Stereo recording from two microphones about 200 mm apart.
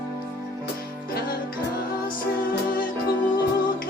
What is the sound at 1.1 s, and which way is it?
Music, 45° left (ahead or behind).